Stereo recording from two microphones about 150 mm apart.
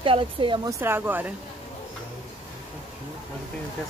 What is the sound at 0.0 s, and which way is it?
Speech, 35° right (ahead or behind).